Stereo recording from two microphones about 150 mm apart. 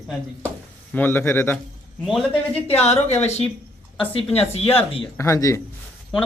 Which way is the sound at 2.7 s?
45° left (ahead or behind).